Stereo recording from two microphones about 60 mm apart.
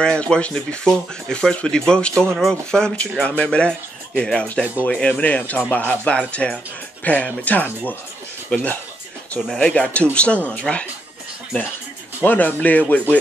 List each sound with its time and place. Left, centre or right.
0.0 s speech: centre; by 7.9 s left
8.5 s speech: centre
12.2 s speech: left